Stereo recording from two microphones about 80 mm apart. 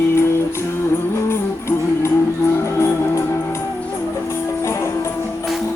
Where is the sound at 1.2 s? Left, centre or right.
Left.